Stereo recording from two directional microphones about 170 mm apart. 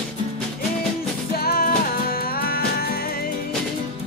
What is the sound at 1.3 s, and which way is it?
Music, 60° left (ahead or behind).